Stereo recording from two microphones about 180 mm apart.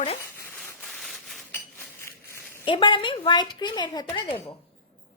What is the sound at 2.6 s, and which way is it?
A woman's voice, 25° left (ahead or behind).